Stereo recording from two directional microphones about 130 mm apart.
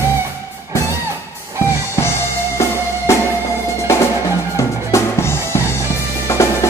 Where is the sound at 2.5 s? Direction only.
20° left (ahead or behind).